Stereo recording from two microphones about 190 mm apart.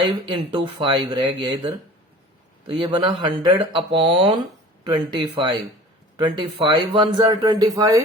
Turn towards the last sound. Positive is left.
turn(degrees=-20)  # may be behind; listen again after turning